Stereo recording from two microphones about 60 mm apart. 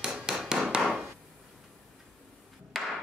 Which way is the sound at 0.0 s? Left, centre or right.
Centre.